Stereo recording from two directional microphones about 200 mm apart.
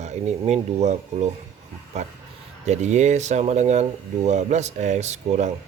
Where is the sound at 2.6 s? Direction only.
35° right (ahead or behind).